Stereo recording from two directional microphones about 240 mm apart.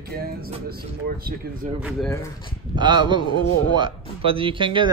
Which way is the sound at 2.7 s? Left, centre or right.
Centre.